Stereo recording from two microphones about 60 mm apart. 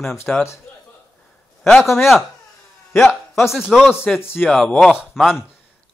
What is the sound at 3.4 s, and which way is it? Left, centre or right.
Speech, centre.